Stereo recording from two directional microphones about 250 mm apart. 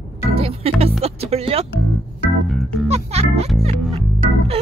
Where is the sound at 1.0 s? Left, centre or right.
Right.